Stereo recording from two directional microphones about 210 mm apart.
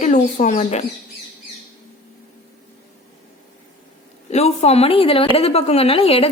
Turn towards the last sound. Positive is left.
turn(degrees=30)  # may be behind; listen again after turning